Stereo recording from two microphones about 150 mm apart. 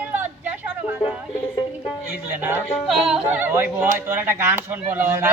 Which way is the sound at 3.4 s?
15° right (ahead or behind).